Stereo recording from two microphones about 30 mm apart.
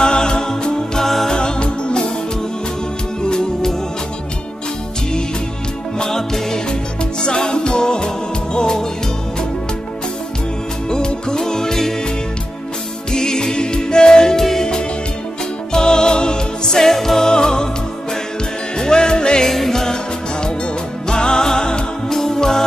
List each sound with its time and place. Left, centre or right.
0.0 s music: left
1.0 s music: centre
1.3 s music: left
3.2 s music: left
6.0 s music: centre
10.9 s music: left
13.1 s music: left
16.9 s music: centre
17.3 s music: left
18.8 s music: left
19.4 s music: centre
21.1 s music: left